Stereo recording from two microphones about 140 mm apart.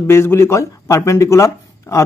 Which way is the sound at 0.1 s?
20° left (ahead or behind).